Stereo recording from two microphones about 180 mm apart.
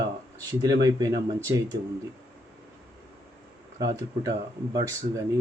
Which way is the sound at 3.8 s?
20° right (ahead or behind).